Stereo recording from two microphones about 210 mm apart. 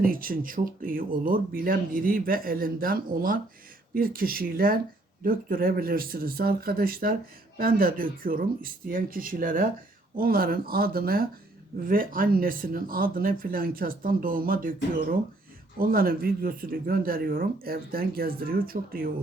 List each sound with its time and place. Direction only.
0.0 s speech: 45° right (ahead or behind)